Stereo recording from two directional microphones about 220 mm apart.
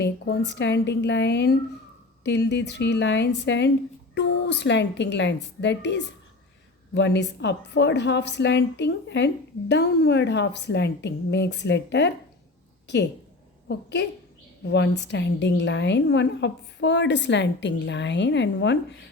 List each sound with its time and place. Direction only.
0.0 s a woman's voice: 50° left (ahead or behind)
13.7 s a woman's voice: 50° left (ahead or behind)